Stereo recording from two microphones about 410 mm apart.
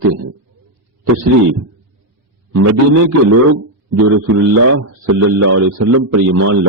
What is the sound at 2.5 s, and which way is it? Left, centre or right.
A man's voice, right.